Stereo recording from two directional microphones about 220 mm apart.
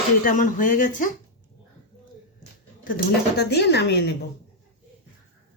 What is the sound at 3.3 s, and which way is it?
Speech, 50° left (ahead or behind).